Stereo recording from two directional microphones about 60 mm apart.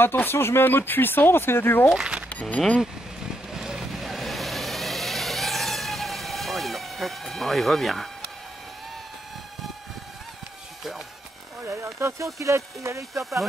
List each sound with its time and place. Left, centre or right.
0.0 s speech: left
2.0 s speech: centre
3.5 s vehicle: centre
11.6 s speech: right